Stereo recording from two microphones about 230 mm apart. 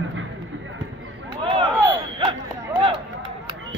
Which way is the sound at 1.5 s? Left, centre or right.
Right.